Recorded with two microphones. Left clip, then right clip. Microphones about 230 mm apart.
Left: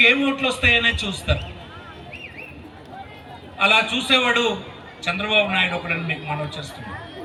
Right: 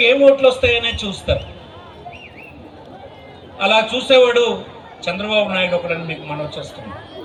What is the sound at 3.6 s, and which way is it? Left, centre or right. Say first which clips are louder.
A man's voice: right 2 dB; left.